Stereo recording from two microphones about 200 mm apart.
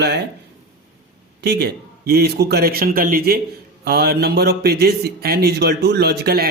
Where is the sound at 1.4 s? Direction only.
55° right (ahead or behind).